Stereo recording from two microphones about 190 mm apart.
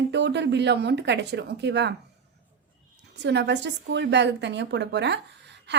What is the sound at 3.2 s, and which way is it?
A woman's voice, 65° right (ahead or behind).